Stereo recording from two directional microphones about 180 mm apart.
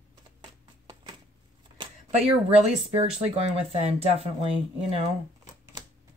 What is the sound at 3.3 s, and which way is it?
Speech, 35° right (ahead or behind).